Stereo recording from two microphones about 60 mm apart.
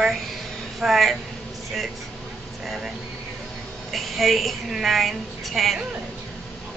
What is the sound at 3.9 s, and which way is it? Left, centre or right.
A woman's voice, centre.